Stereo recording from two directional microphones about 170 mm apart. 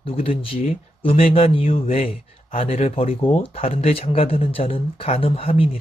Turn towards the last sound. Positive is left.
turn(degrees=35)  # may be behind; listen again after turning